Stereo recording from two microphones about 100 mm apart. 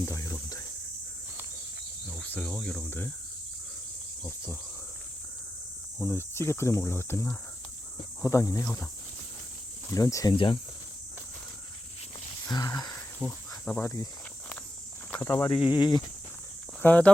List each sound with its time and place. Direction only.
0.0 s cricket: 30° left (ahead or behind)
2.0 s cricket: 15° left (ahead or behind)
2.5 s speech: 10° left (ahead or behind)
6.0 s speech: 20° left (ahead or behind)
8.2 s speech: 35° left (ahead or behind)
9.9 s speech: 35° left (ahead or behind)
10.3 s speech: 55° left (ahead or behind)
12.5 s a sound: 40° left (ahead or behind)
13.2 s cricket: 5° left (ahead or behind)
13.7 s speech: 15° left (ahead or behind)
15.2 s speech: 35° left (ahead or behind)
15.4 s speech: 55° left (ahead or behind)
16.8 s speech: 15° left (ahead or behind)